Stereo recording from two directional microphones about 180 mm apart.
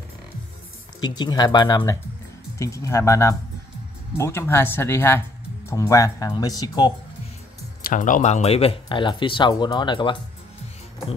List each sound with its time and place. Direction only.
1.0 s speech: 25° left (ahead or behind)
7.9 s speech: 45° left (ahead or behind); by 10.1 s 25° left (ahead or behind)